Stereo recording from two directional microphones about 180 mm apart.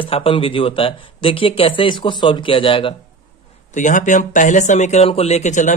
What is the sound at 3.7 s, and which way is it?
Speech, 45° left (ahead or behind).